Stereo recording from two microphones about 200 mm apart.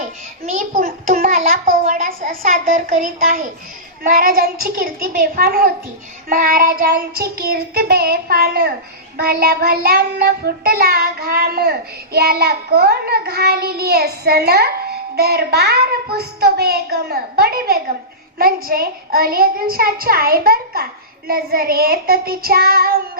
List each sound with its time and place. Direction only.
0.4 s a child's voice: 40° right (ahead or behind)
4.0 s child singing: 45° right (ahead or behind)